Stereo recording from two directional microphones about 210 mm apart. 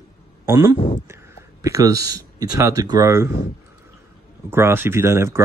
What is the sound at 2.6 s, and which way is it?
Speech, 15° right (ahead or behind).